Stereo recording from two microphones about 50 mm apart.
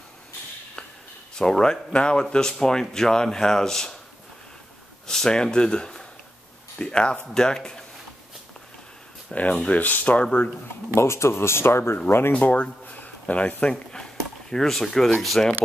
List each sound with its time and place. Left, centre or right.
1.3 s speech: centre
5.0 s speech: centre
9.3 s speech: left
11.0 s speech: left
12.3 s speech: left
12.8 s a sound: left
13.9 s a sound: centre
15.2 s speech: centre